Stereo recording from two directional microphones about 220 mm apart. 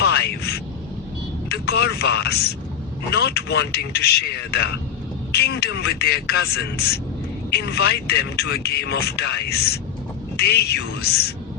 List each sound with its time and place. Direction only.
0.0 s a sound: 50° left (ahead or behind)
1.5 s vehicle: 50° left (ahead or behind)
3.1 s speech: 50° left (ahead or behind)